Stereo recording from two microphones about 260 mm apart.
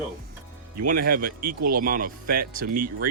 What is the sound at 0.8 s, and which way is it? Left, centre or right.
Speech, right.